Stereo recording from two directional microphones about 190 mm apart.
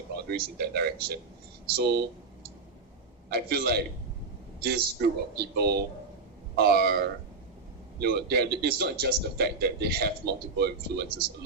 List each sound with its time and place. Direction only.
0.3 s speech: 55° right (ahead or behind)